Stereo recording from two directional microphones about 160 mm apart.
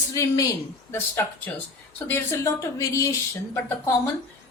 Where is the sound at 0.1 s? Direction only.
20° left (ahead or behind).